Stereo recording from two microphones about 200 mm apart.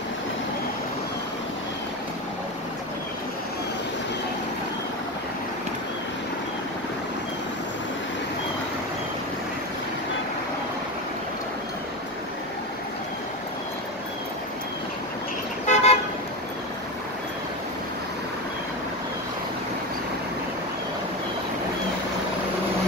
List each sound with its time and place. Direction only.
15.6 s car: 35° left (ahead or behind)